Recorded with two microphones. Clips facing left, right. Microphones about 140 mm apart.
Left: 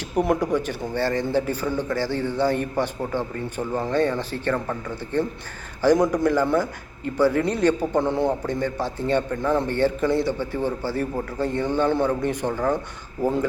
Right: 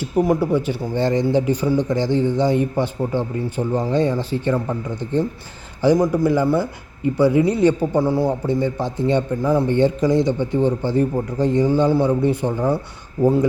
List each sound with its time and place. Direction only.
0.0 s a man's voice: 5° right (ahead or behind)